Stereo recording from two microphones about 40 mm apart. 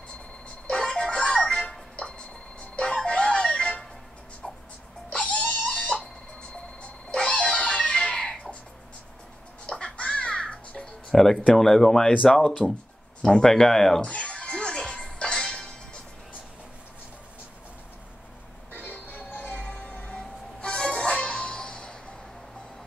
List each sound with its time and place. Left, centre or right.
0.7 s music: left
5.1 s music: left
6.8 s music: left
9.7 s music: left
11.1 s speech: centre
12.6 s speech: left
13.3 s speech: centre
14.0 s music: left
18.7 s music: left
20.6 s music: left
21.5 s a sound: left